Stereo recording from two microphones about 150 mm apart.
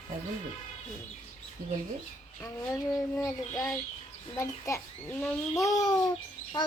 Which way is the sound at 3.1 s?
20° left (ahead or behind).